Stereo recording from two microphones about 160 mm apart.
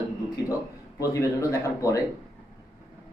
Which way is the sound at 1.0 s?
20° left (ahead or behind).